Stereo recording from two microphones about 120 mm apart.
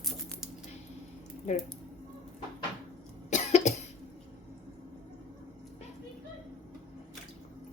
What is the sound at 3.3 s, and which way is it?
Cough, 75° left (ahead or behind).